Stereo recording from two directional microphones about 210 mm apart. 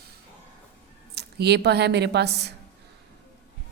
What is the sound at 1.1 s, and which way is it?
A woman's voice, 50° right (ahead or behind).